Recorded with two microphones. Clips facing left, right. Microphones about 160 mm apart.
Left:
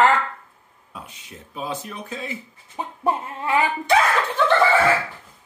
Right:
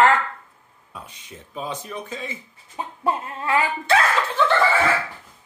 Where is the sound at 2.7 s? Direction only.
15° left (ahead or behind).